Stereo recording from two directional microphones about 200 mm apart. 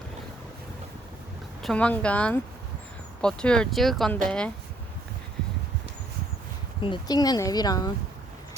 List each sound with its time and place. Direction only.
1.6 s speech: 5° left (ahead or behind)
6.8 s speech: 20° left (ahead or behind)